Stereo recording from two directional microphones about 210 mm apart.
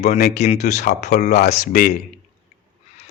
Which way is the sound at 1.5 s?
40° left (ahead or behind).